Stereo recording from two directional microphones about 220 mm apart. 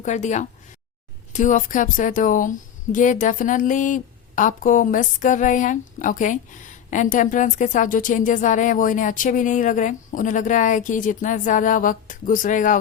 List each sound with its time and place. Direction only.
0.0 s a woman's voice: 35° left (ahead or behind)